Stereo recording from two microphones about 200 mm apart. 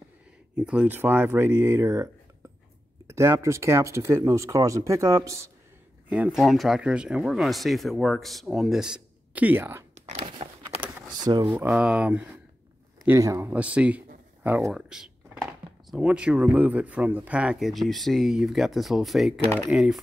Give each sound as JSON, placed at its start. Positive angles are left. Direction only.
{"t": 0.6, "sound": "speech", "side_deg": -5}
{"t": 3.1, "sound": "speech", "side_deg": -15}
{"t": 9.9, "sound": "a sound", "side_deg": -35}
{"t": 11.0, "sound": "speech", "side_deg": -15}